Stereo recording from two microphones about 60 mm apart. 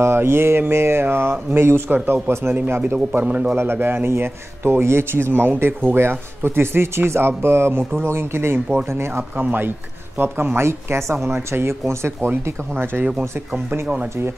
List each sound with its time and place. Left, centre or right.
0.0 s a man's voice: right
3.2 s a man's voice: right
3.5 s a man's voice: right
9.4 s a man's voice: right